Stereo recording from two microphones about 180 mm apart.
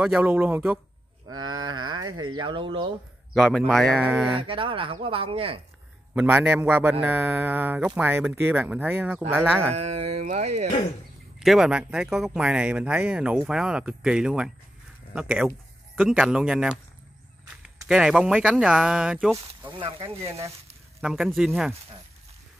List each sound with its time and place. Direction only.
0.0 s a man's voice: 5° right (ahead or behind)
1.3 s speech: 20° right (ahead or behind)
3.3 s speech: centre (ahead or behind)
4.4 s speech: 30° right (ahead or behind)
6.1 s a man's voice: 5° right (ahead or behind)
9.3 s speech: centre (ahead or behind)
9.8 s speech: 35° right (ahead or behind)
11.3 s speech: centre (ahead or behind)
17.8 s speech: 5° right (ahead or behind)
19.4 s speech: 30° right (ahead or behind)
21.0 s speech: centre (ahead or behind)